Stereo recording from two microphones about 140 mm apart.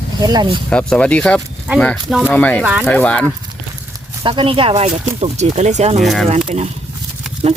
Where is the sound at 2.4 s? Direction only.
10° left (ahead or behind).